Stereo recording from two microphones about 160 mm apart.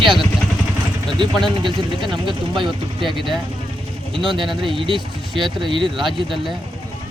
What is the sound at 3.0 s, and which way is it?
Speech, centre (ahead or behind).